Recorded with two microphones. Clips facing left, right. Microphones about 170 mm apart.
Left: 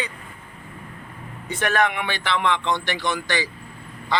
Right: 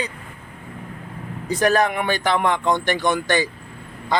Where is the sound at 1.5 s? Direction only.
35° right (ahead or behind).